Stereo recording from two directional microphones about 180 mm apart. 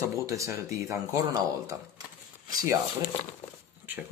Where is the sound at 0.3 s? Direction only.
15° right (ahead or behind).